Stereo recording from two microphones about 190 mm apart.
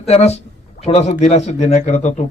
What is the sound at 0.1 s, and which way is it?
A man's voice, 35° left (ahead or behind).